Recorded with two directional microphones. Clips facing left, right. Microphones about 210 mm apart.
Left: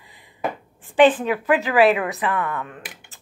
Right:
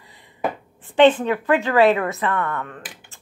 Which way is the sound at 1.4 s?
15° left (ahead or behind).